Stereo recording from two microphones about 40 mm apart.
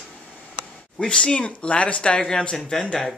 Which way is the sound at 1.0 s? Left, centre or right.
Left.